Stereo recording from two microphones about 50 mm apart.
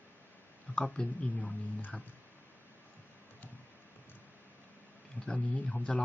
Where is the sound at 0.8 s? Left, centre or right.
Left.